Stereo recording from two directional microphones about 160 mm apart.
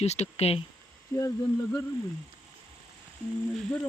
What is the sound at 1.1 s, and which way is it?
Speech, 20° left (ahead or behind).